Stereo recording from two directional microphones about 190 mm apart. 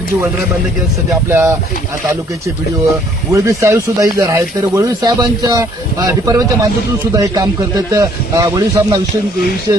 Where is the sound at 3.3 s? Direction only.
15° right (ahead or behind).